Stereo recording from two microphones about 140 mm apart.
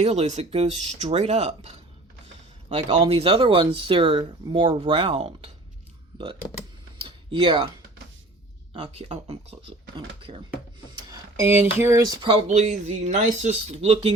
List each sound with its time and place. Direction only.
0.0 s speech: 50° right (ahead or behind)
2.7 s speech: 40° right (ahead or behind)
4.9 s speech: 45° right (ahead or behind)
7.3 s speech: 35° right (ahead or behind)
8.9 s speech: 50° right (ahead or behind)
10.8 s a sound: 30° right (ahead or behind)
11.3 s speech: 15° right (ahead or behind); by 12.4 s 30° right (ahead or behind)
12.5 s speech: 55° right (ahead or behind)